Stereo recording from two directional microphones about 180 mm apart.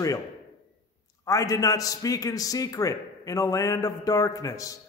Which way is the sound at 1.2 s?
20° left (ahead or behind).